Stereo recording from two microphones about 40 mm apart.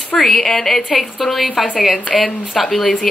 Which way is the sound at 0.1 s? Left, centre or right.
Centre.